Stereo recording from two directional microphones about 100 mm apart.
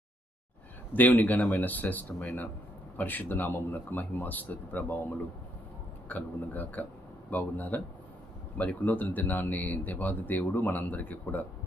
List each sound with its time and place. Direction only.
0.9 s speech: 15° left (ahead or behind)